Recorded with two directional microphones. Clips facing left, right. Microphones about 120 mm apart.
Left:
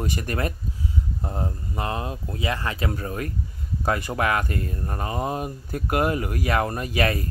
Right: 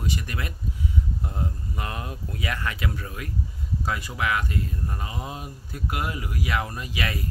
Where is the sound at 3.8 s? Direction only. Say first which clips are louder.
Left 5 dB; 55° left (ahead or behind).